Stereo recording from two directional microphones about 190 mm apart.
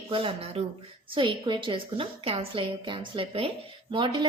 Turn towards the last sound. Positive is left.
turn(degrees=-25)  # may be behind; listen again after turning